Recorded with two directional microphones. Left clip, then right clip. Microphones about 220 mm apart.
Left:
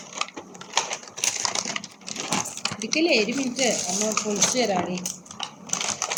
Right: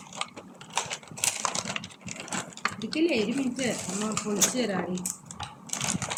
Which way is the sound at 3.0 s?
30° right (ahead or behind).